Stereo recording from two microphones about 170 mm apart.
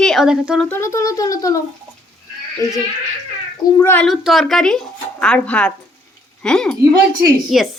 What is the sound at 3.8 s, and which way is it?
Speech, 10° left (ahead or behind).